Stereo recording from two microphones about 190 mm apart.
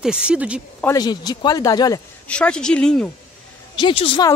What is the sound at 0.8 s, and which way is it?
Speech, 20° left (ahead or behind).